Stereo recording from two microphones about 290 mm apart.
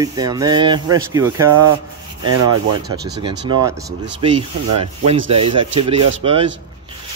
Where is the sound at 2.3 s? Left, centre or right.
Right.